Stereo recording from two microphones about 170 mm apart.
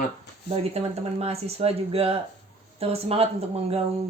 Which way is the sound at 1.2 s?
35° right (ahead or behind).